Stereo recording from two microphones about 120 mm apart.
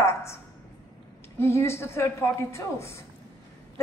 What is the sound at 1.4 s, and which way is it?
A woman's voice, 20° left (ahead or behind).